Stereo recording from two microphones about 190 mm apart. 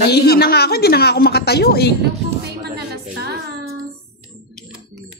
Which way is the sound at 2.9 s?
55° right (ahead or behind).